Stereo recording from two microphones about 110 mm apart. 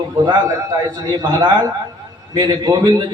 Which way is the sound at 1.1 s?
45° right (ahead or behind).